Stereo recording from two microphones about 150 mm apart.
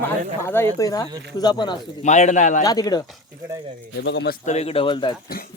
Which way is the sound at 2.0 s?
50° left (ahead or behind).